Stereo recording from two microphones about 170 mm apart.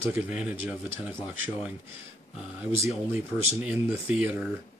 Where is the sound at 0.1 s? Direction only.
10° right (ahead or behind).